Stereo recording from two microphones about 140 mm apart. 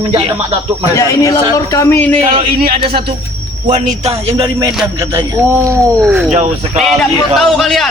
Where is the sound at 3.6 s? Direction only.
60° right (ahead or behind).